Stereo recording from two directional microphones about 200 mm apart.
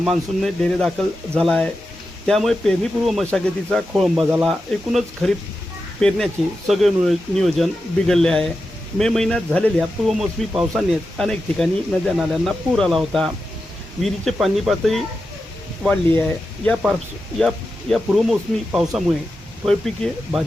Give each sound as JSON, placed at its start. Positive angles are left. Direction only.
{"t": 0.0, "sound": "speech", "side_deg": 0}
{"t": 17.9, "sound": "speech", "side_deg": -5}